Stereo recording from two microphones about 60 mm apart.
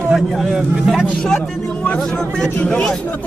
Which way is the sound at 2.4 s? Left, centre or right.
Centre.